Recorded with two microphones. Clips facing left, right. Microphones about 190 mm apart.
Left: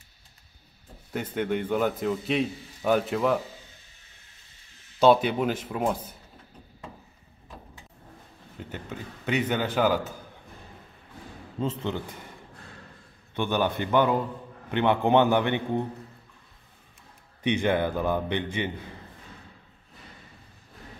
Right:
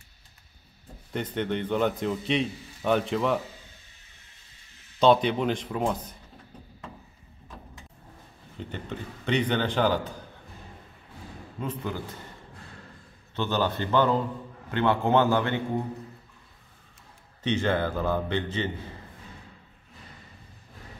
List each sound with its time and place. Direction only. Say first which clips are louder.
1.1 s a man's voice: left 1 dB; 5° left (ahead or behind)
5.0 s a man's voice: left 1 dB; 5° left (ahead or behind)
8.5 s a man's voice: right 2 dB; 5° left (ahead or behind)
11.6 s a man's voice: left 3 dB; 25° left (ahead or behind)
13.4 s a man's voice: left 1 dB; 15° left (ahead or behind)
17.4 s a man's voice: left 2 dB; 15° left (ahead or behind)